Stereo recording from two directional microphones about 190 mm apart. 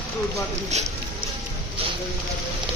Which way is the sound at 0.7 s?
35° right (ahead or behind).